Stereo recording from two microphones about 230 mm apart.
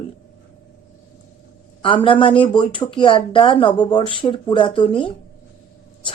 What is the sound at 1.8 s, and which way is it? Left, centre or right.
A woman's voice, left.